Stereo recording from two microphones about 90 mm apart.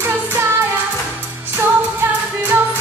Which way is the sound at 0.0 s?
25° right (ahead or behind).